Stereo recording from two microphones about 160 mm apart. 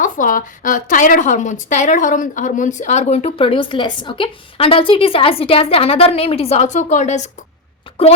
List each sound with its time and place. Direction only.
0.0 s a woman's voice: 55° left (ahead or behind)